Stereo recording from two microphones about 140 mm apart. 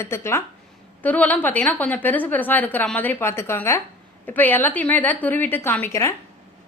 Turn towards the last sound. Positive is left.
turn(degrees=20)  # may be behind; listen again after turning